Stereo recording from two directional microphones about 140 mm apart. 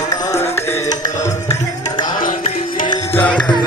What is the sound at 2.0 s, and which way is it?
Music, 70° left (ahead or behind).